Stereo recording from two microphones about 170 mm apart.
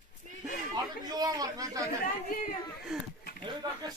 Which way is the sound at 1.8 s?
55° left (ahead or behind).